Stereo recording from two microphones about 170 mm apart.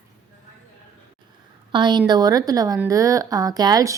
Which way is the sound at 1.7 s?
25° right (ahead or behind).